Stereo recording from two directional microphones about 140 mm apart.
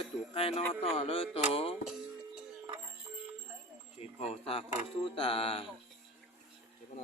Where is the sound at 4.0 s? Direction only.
50° left (ahead or behind).